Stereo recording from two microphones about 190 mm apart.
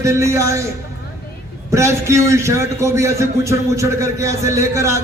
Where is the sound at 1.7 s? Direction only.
15° right (ahead or behind).